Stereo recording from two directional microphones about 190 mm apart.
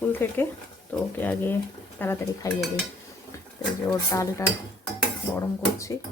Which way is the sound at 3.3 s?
15° left (ahead or behind).